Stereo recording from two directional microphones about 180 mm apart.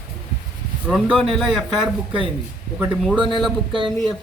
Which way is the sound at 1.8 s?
30° right (ahead or behind).